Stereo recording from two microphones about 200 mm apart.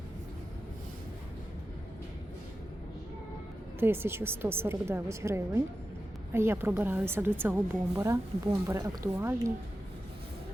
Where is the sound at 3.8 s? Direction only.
10° right (ahead or behind).